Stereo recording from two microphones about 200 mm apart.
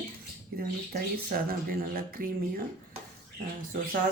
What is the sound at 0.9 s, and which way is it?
Speech, 45° right (ahead or behind).